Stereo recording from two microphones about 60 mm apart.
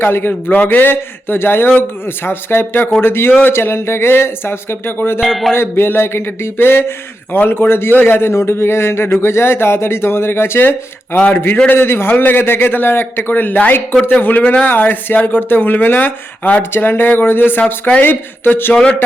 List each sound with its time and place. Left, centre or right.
0.0 s a man's voice: left
5.2 s speech: centre
5.5 s a man's voice: left